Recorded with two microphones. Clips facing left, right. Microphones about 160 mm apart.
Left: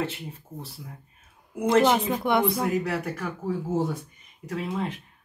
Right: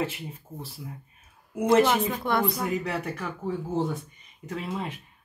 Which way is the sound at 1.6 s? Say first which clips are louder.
Even; 5° right (ahead or behind).